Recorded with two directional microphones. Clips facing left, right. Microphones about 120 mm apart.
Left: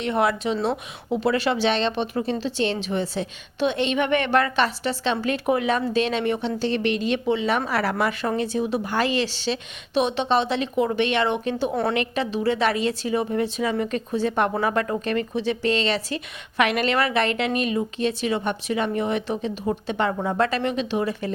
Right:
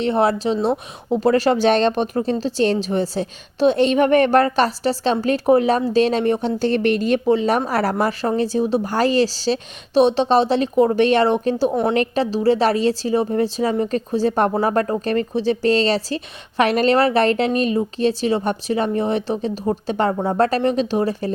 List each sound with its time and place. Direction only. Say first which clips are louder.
0.0 s speech: right 5 dB; 30° right (ahead or behind)
11.7 s a woman's voice: right 4 dB; 20° right (ahead or behind)
11.9 s speech: right 5 dB; 35° right (ahead or behind)